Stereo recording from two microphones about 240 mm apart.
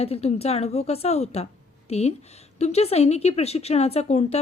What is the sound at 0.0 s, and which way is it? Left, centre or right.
A woman's voice, left.